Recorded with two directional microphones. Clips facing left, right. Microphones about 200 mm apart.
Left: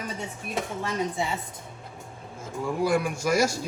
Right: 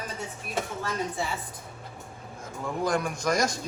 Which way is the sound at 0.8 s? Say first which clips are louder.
Left 3 dB; 20° left (ahead or behind).